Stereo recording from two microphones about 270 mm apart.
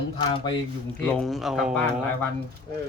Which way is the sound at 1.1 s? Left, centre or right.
Centre.